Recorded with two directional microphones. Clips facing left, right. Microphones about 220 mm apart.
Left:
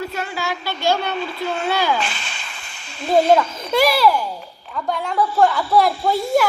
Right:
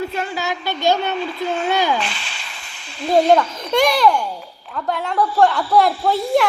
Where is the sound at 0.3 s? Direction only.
20° right (ahead or behind).